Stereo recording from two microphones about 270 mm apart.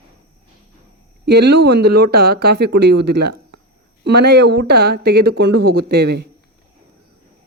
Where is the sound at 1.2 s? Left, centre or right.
Right.